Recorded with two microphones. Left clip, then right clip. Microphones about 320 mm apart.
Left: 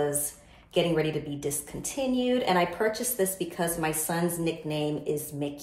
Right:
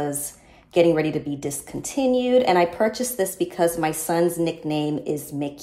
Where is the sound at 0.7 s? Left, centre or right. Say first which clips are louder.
Right 7 dB; right.